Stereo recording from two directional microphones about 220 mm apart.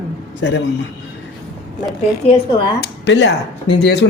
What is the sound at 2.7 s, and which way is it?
Speech, 50° left (ahead or behind).